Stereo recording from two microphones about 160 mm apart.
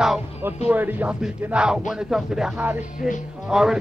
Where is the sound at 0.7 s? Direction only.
10° right (ahead or behind).